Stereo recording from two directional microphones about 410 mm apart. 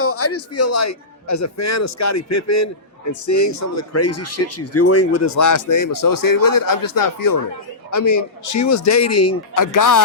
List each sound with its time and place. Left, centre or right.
0.0 s a man's voice: left